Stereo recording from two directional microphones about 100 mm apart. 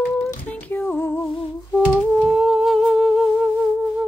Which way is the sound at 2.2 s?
Centre (ahead or behind).